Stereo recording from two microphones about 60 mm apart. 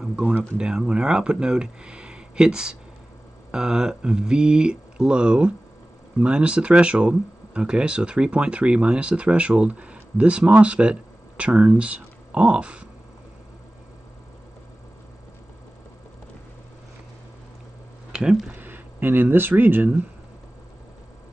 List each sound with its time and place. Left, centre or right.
0.4 s speech: centre
18.6 s speech: right